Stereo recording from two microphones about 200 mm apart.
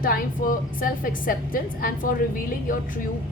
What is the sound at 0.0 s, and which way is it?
A woman's voice, 45° left (ahead or behind).